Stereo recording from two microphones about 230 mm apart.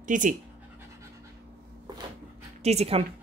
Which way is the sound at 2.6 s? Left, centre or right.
Right.